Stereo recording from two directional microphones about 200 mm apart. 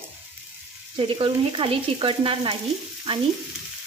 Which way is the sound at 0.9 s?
25° right (ahead or behind).